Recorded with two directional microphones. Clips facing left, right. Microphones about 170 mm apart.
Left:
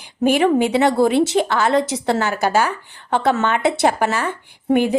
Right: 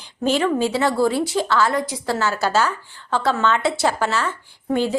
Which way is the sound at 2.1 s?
15° left (ahead or behind).